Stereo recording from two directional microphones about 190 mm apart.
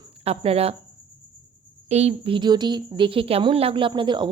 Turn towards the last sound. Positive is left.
turn(degrees=-25)  # may be behind; listen again after turning